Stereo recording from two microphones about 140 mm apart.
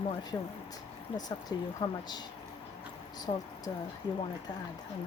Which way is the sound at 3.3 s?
35° left (ahead or behind).